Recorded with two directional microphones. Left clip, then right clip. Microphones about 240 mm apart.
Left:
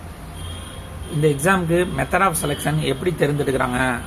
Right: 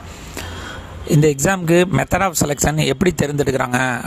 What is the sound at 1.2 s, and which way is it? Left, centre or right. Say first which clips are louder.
Speech: even; right.